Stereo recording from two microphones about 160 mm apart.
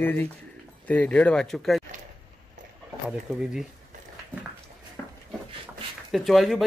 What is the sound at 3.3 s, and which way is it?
Speech, 5° right (ahead or behind).